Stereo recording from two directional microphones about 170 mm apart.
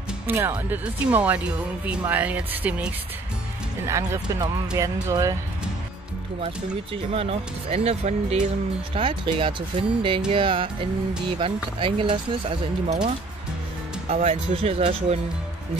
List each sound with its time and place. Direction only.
0.3 s speech: 10° right (ahead or behind)
6.4 s speech: 35° right (ahead or behind)
14.1 s speech: 35° right (ahead or behind)